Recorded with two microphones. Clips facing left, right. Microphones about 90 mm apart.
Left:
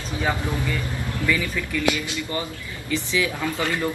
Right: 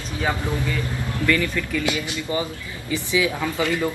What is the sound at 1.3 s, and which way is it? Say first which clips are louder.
Speech: right 3 dB; 10° left (ahead or behind).